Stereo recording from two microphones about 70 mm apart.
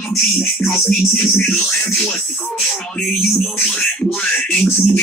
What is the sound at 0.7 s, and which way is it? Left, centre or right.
Speech, left.